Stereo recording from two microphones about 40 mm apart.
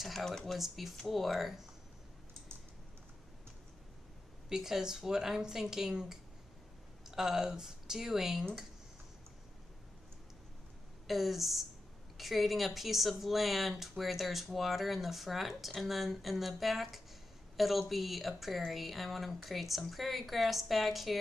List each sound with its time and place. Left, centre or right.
0.0 s speech: centre
0.6 s speech: centre
4.5 s speech: centre
11.1 s speech: centre